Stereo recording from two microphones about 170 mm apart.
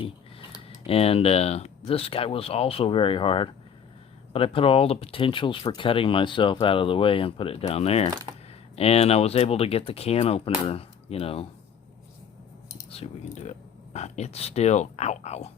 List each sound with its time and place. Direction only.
0.9 s speech: 35° left (ahead or behind)
8.1 s speech: 20° right (ahead or behind)
8.7 s speech: 35° left (ahead or behind)
12.9 s speech: 40° left (ahead or behind)